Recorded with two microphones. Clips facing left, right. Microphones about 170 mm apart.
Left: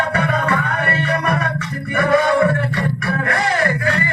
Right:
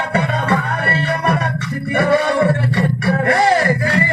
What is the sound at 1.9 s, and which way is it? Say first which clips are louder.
Music: even; 35° right (ahead or behind).